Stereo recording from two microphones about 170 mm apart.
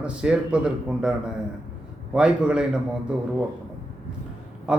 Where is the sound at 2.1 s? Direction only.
5° right (ahead or behind).